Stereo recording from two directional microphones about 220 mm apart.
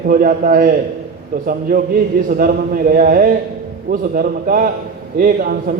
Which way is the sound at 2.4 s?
40° right (ahead or behind).